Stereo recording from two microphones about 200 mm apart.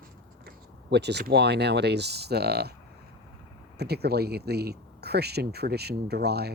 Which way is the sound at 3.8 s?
55° right (ahead or behind).